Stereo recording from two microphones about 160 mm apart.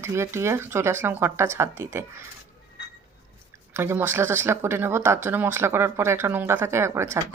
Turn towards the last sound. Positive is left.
turn(degrees=-15)  # may be behind; listen again after turning